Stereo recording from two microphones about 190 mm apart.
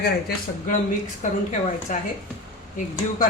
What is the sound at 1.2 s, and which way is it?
Speech, 40° left (ahead or behind).